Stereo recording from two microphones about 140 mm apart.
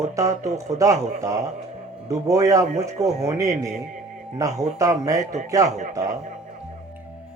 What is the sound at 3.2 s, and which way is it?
Speech, 20° right (ahead or behind).